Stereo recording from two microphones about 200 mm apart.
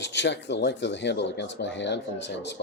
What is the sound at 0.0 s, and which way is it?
Speech, 60° left (ahead or behind).